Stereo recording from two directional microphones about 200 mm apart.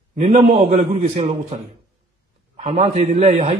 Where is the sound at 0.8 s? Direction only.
25° right (ahead or behind).